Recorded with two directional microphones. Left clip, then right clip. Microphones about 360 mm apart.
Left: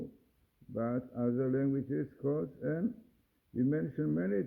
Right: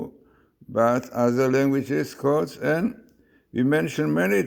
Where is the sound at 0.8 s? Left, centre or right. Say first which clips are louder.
Right 15 dB; right.